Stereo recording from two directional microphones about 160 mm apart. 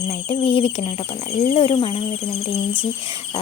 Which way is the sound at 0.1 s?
40° left (ahead or behind).